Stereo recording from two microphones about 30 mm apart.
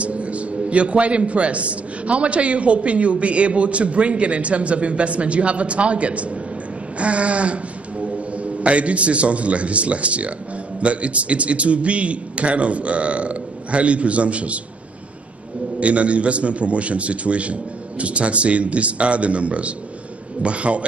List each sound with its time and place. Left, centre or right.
0.0 s a man's voice: right
15.8 s a man's voice: right